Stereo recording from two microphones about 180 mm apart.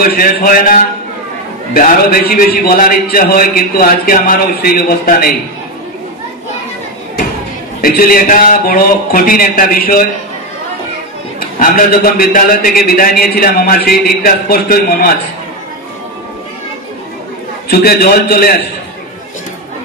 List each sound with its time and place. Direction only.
0.0 s a man's voice: 55° left (ahead or behind)
7.8 s a man's voice: 55° left (ahead or behind)
11.3 s a man's voice: 55° left (ahead or behind)
17.6 s a man's voice: 60° left (ahead or behind)